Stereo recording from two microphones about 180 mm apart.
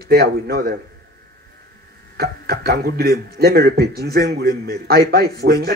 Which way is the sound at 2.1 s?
60° right (ahead or behind).